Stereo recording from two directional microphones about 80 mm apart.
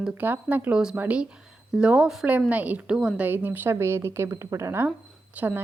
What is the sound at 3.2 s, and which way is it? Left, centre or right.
A woman's voice, right.